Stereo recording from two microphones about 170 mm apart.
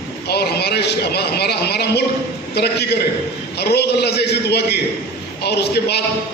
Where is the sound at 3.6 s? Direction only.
75° left (ahead or behind).